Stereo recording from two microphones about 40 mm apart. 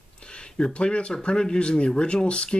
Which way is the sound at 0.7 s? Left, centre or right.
Left.